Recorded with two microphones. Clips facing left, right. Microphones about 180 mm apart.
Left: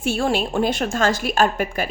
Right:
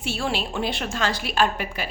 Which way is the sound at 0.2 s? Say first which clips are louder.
Left 5 dB; 50° left (ahead or behind).